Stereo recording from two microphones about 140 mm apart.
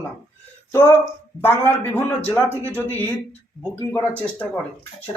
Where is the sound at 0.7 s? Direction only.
20° left (ahead or behind).